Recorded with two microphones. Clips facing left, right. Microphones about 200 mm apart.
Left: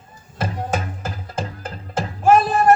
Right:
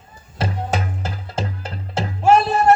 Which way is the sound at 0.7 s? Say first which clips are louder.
Right 1 dB; 50° left (ahead or behind).